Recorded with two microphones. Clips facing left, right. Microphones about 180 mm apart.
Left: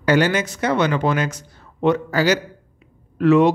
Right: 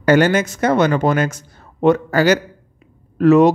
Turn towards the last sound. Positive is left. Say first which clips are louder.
# right 3 dB
turn(degrees=-40)  # may be behind; listen again after turning